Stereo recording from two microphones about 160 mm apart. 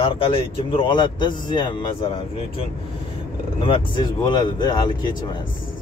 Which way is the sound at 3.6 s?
30° left (ahead or behind).